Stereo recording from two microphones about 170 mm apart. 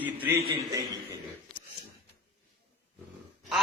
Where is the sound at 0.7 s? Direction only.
20° right (ahead or behind).